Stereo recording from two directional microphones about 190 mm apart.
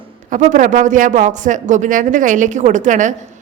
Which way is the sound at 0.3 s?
45° right (ahead or behind).